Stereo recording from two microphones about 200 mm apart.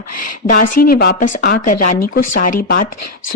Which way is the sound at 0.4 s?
45° left (ahead or behind).